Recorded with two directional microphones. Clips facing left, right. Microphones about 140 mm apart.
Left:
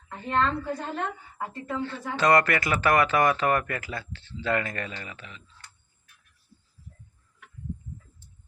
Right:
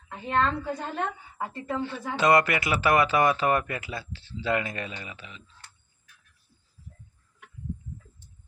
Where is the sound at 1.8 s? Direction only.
20° right (ahead or behind).